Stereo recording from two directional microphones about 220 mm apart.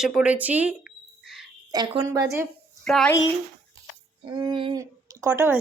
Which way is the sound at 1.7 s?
15° right (ahead or behind).